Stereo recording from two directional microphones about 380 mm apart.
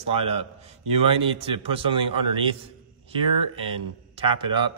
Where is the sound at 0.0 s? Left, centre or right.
Centre.